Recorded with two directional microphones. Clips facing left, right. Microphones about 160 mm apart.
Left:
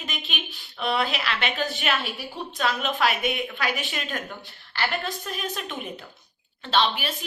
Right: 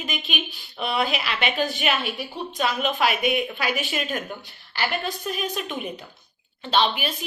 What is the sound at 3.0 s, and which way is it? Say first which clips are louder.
Speech: right 2 dB; 20° right (ahead or behind).